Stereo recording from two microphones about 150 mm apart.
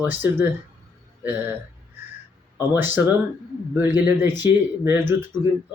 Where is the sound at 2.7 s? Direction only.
15° right (ahead or behind).